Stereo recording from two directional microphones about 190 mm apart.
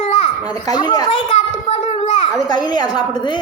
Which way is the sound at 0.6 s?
20° left (ahead or behind).